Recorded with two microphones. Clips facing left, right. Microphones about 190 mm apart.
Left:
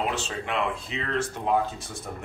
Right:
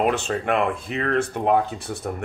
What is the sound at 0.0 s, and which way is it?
Speech, 55° right (ahead or behind).